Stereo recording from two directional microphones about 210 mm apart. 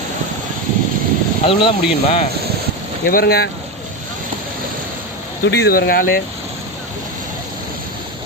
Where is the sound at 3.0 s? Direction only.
45° left (ahead or behind).